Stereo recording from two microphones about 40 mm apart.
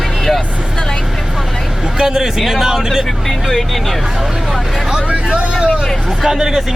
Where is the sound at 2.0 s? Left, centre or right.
Centre.